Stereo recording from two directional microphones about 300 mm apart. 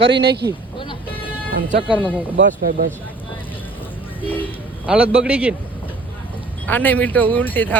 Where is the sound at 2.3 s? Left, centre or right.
Right.